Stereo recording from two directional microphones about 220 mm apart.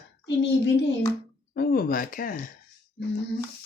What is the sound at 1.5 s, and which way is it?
Speech, 45° left (ahead or behind).